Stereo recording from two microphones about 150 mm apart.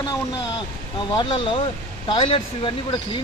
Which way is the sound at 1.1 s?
35° left (ahead or behind).